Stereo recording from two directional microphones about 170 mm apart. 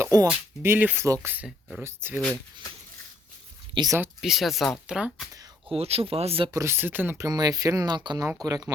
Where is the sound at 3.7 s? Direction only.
25° right (ahead or behind).